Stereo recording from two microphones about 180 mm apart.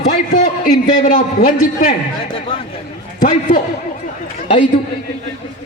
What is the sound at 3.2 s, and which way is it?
Speech, 45° left (ahead or behind).